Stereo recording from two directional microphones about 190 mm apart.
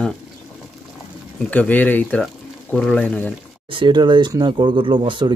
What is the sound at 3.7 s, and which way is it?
Speech, 25° right (ahead or behind).